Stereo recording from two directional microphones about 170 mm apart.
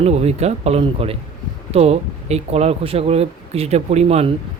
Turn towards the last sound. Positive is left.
turn(degrees=-40)  # may be behind; listen again after turning